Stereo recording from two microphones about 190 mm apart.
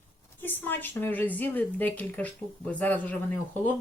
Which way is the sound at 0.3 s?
10° left (ahead or behind).